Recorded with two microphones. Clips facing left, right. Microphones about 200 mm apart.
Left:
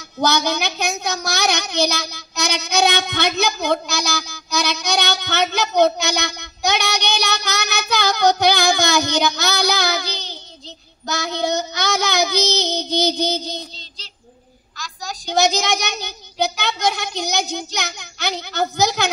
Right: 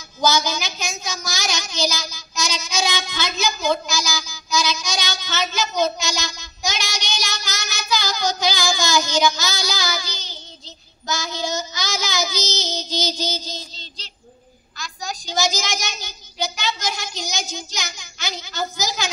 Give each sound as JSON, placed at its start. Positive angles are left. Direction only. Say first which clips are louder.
{"t": 0.2, "sound": "a woman's voice", "louder": "left 2 dB", "side_deg": 60}
{"t": 14.8, "sound": "a sound", "louder": "even", "side_deg": 0}
{"t": 15.2, "sound": "a woman's voice", "louder": "left 6 dB", "side_deg": 65}